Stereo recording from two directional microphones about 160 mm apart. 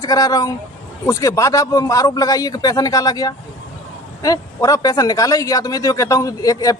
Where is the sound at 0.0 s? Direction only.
20° left (ahead or behind).